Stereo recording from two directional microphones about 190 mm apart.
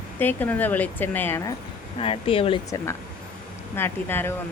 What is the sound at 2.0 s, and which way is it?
Speech, 30° left (ahead or behind).